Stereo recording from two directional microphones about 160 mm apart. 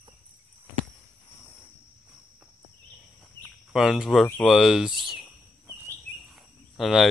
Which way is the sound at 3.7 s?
Centre (ahead or behind).